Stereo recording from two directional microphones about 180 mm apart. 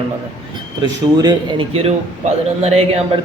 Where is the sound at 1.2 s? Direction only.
25° right (ahead or behind).